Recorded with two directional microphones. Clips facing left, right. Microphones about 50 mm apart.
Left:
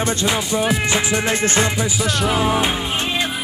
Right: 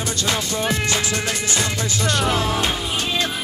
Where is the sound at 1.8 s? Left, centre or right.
Centre.